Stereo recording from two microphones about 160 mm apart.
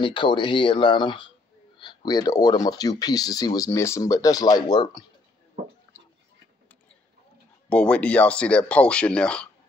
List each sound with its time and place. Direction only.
0.0 s speech: 30° left (ahead or behind)
7.7 s speech: 5° left (ahead or behind)